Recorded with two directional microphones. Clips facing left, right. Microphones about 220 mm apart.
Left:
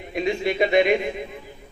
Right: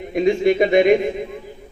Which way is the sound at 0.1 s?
50° right (ahead or behind).